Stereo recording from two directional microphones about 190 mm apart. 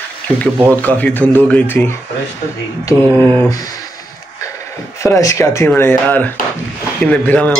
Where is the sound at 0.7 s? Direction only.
10° left (ahead or behind).